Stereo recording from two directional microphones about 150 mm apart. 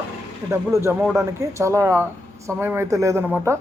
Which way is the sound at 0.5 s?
15° right (ahead or behind).